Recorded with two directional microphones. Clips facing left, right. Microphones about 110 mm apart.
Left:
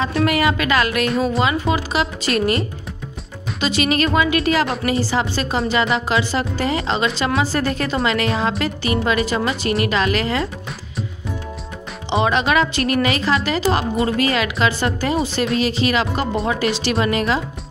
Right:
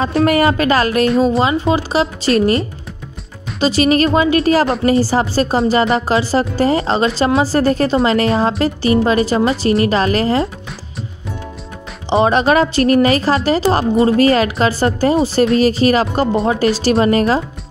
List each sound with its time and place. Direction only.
0.0 s a woman's voice: 35° right (ahead or behind)
12.1 s a woman's voice: 35° right (ahead or behind)